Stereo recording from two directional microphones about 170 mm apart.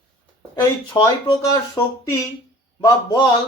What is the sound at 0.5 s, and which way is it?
Speech, 25° left (ahead or behind).